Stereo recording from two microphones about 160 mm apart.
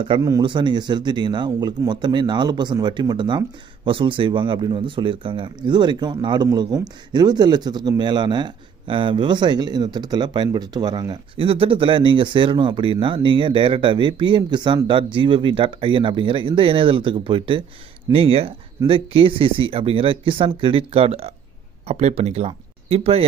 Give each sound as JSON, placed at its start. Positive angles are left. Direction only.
{"t": 0.2, "sound": "speech", "side_deg": -25}